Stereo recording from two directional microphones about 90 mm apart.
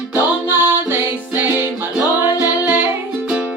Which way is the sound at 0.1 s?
25° right (ahead or behind).